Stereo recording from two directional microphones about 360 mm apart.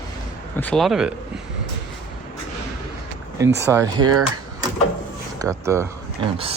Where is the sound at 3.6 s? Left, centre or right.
Centre.